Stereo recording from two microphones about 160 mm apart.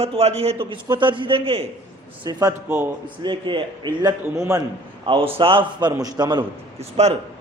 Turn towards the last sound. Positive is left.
turn(degrees=-40)  # may be behind; listen again after turning